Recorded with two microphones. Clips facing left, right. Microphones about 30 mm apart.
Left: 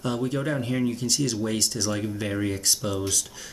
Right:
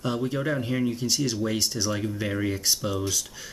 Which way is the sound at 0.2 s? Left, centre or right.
Centre.